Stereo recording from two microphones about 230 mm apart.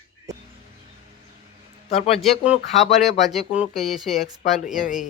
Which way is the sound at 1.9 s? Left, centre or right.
Left.